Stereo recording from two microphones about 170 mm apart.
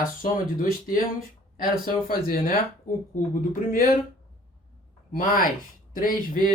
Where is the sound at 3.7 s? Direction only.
55° left (ahead or behind).